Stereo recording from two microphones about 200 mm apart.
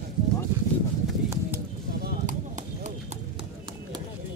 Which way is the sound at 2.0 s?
40° right (ahead or behind).